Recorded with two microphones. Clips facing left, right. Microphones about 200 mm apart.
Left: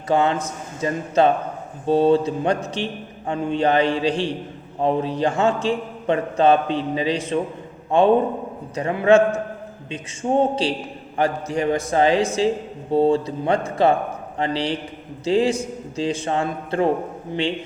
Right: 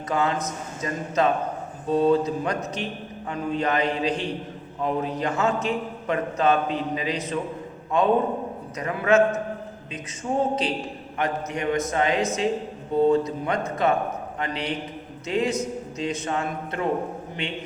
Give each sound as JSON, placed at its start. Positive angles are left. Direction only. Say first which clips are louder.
{"t": 0.1, "sound": "a man's voice", "louder": "left 5 dB", "side_deg": 30}